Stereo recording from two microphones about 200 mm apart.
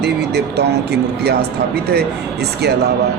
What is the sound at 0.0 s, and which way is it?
Speech, 55° right (ahead or behind).